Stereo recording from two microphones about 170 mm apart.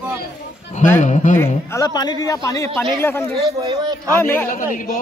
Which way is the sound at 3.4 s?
20° right (ahead or behind).